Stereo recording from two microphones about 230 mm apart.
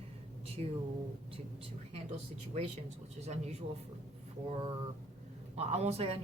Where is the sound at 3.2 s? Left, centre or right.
Right.